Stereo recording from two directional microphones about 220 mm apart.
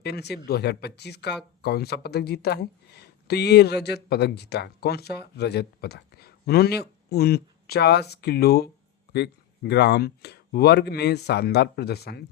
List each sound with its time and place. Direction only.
0.0 s speech: 50° left (ahead or behind)